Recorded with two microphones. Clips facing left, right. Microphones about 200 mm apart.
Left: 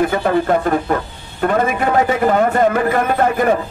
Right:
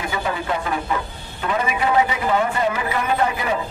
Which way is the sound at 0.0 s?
50° left (ahead or behind).